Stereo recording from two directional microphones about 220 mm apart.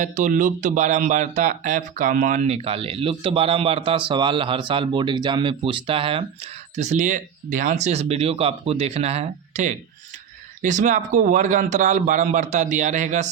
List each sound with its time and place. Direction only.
0.0 s speech: 35° right (ahead or behind)